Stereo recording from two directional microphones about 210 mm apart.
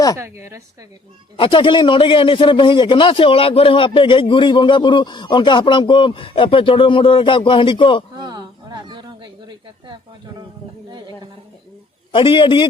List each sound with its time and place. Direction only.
0.2 s a woman's voice: 15° right (ahead or behind)
1.4 s a man's voice: 25° left (ahead or behind)
8.1 s a sound: 20° right (ahead or behind)
12.1 s a man's voice: 25° left (ahead or behind)